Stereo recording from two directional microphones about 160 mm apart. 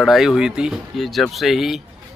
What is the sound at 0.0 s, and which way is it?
Speech, centre (ahead or behind).